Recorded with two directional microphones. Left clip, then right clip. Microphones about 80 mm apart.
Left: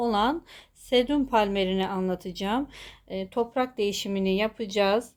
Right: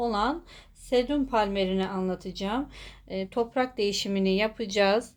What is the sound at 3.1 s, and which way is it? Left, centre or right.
Speech, left.